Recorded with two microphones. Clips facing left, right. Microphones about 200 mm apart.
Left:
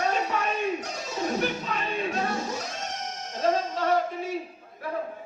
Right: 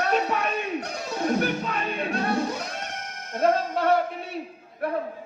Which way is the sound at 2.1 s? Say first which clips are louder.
Right 3 dB; 60° right (ahead or behind).